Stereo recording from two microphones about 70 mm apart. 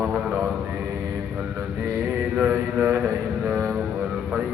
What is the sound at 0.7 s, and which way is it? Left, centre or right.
Mantra, right.